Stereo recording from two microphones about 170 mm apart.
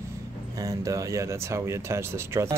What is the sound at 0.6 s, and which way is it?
Speech, 20° right (ahead or behind).